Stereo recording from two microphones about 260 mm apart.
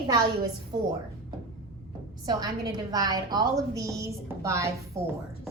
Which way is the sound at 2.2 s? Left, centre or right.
Centre.